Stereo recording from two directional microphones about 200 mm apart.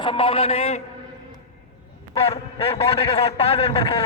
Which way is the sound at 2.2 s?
30° left (ahead or behind).